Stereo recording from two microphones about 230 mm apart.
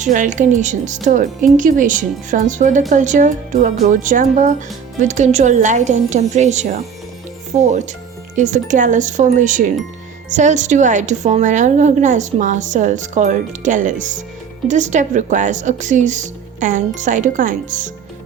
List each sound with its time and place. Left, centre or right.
0.0 s a woman's voice: right